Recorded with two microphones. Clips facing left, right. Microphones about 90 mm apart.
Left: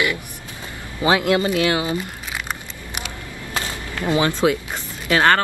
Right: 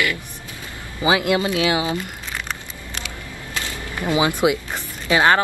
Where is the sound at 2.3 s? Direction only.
15° left (ahead or behind).